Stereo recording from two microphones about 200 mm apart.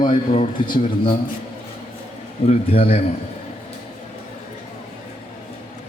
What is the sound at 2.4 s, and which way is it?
Speech, 30° left (ahead or behind).